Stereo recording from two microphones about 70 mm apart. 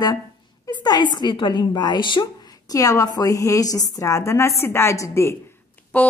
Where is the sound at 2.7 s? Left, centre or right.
Left.